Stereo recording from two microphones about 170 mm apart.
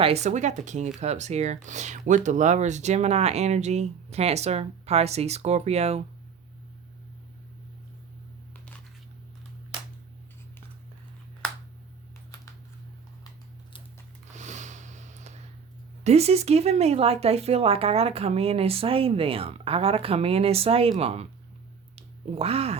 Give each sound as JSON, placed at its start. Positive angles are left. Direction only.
{"t": 0.0, "sound": "speech", "side_deg": -40}
{"t": 14.3, "sound": "a sound", "side_deg": -45}
{"t": 16.0, "sound": "speech", "side_deg": -40}